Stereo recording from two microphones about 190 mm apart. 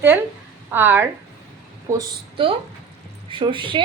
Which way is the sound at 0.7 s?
10° right (ahead or behind).